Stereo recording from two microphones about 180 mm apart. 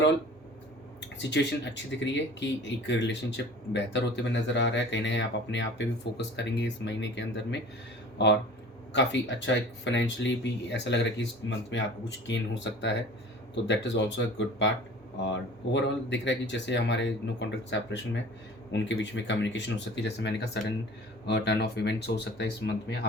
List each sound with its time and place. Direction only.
1.2 s speech: 75° left (ahead or behind)
8.9 s speech: 80° left
15.7 s speech: 75° left (ahead or behind)